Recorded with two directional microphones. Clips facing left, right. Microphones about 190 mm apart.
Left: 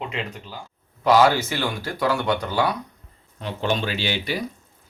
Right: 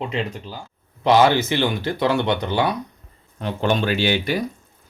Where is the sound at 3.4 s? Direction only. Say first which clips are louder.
Right 4 dB; 50° right (ahead or behind).